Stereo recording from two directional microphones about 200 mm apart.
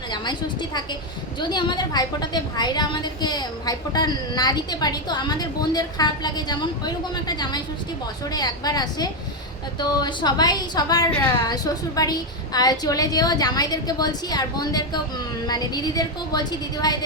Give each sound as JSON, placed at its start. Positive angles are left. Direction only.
{"t": 0.1, "sound": "a woman's voice", "side_deg": 20}